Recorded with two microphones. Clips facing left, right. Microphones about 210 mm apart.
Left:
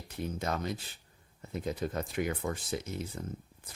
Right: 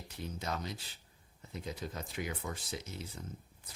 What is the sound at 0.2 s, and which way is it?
Speech, 50° left (ahead or behind).